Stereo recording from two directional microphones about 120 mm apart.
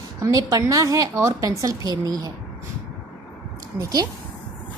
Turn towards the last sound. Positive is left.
turn(degrees=-30)  # may be behind; listen again after turning